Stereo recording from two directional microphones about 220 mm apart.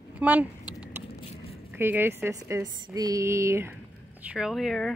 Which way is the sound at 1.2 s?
25° left (ahead or behind).